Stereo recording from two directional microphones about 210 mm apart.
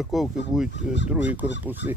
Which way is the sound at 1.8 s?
10° right (ahead or behind).